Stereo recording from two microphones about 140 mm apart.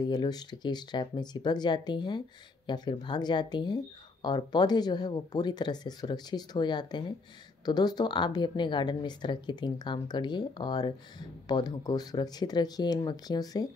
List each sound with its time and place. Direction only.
0.1 s speech: 30° left (ahead or behind)